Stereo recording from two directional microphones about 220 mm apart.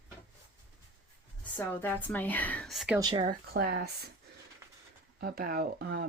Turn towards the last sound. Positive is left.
turn(degrees=-45)  # may be behind; listen again after turning